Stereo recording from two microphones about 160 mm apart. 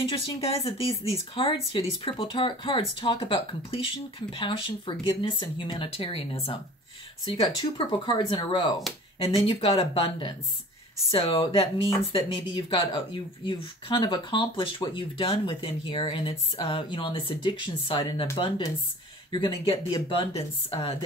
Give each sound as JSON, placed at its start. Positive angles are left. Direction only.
{"t": 0.0, "sound": "speech", "side_deg": 35}
{"t": 7.7, "sound": "speech", "side_deg": 30}
{"t": 19.3, "sound": "speech", "side_deg": 30}